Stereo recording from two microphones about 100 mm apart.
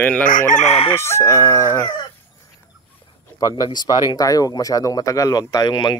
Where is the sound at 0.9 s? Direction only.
25° left (ahead or behind).